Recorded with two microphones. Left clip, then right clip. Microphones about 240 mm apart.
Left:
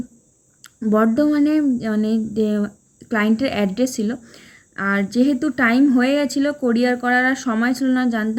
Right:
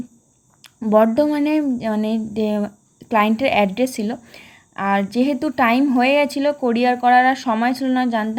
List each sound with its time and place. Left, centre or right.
0.6 s a woman's voice: centre